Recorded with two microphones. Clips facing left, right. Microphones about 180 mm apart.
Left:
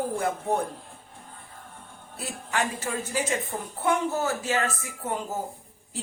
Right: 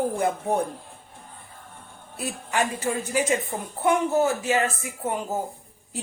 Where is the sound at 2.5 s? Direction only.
15° right (ahead or behind).